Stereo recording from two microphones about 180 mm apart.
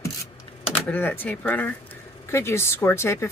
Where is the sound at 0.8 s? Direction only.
10° left (ahead or behind).